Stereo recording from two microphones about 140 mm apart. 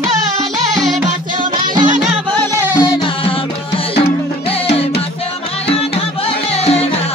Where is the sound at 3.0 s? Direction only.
40° left (ahead or behind).